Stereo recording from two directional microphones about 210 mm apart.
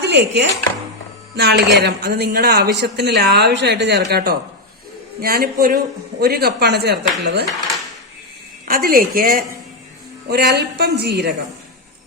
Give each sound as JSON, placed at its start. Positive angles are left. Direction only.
{"t": 0.0, "sound": "speech", "side_deg": -55}
{"t": 8.6, "sound": "speech", "side_deg": -45}